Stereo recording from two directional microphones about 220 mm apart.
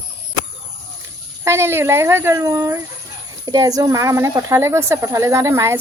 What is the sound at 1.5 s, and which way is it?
Speech, 10° right (ahead or behind).